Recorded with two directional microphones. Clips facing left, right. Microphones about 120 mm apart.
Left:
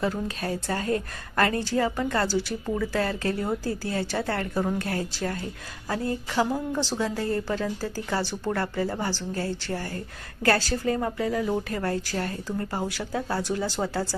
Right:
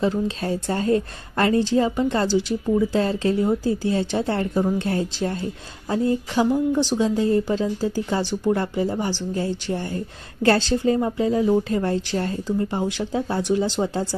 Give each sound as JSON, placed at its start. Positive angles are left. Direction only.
{"t": 0.0, "sound": "a woman's voice", "side_deg": -25}